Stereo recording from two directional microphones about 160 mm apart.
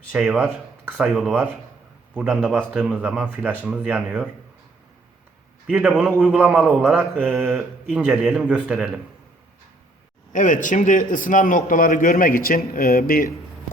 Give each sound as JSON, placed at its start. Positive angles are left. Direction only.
{"t": 0.1, "sound": "a man's voice", "side_deg": -5}
{"t": 5.6, "sound": "a man's voice", "side_deg": -10}
{"t": 10.3, "sound": "a man's voice", "side_deg": 55}